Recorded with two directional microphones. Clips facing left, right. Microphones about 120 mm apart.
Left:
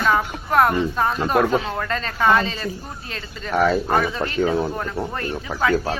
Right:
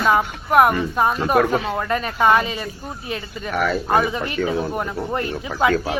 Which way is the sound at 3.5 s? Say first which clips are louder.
Left 3 dB; 25° left (ahead or behind).